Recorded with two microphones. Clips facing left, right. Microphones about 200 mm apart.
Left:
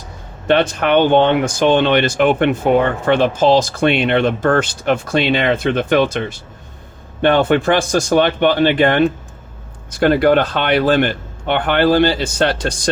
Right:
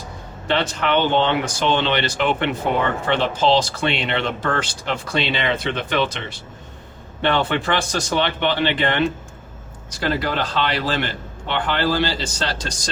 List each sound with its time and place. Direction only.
0.4 s a man's voice: 55° left (ahead or behind)